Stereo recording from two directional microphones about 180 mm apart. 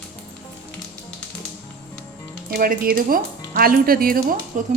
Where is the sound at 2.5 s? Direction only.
50° right (ahead or behind).